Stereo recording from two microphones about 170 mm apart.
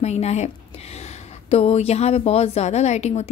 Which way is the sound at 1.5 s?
35° left (ahead or behind).